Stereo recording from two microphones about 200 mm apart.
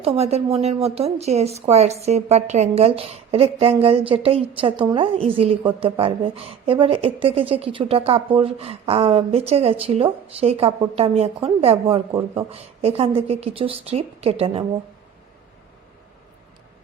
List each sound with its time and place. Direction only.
0.0 s speech: 30° right (ahead or behind)
12.1 s speech: 15° right (ahead or behind)
12.5 s a woman's voice: 30° right (ahead or behind)